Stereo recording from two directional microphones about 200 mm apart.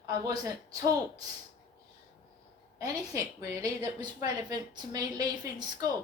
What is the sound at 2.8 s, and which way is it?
A woman's voice, 15° right (ahead or behind).